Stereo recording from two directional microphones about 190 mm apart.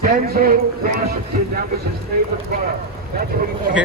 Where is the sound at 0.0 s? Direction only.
50° right (ahead or behind).